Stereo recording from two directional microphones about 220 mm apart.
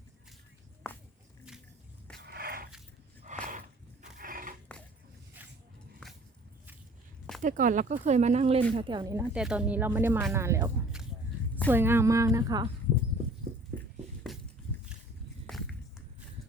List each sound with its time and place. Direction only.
2.1 s dog: 45° right (ahead or behind)
3.3 s a sound: 35° right (ahead or behind)
7.4 s speech: 35° right (ahead or behind); by 9.2 s 15° right (ahead or behind)
9.3 s speech: 5° right (ahead or behind)
15.4 s walk: centre (ahead or behind)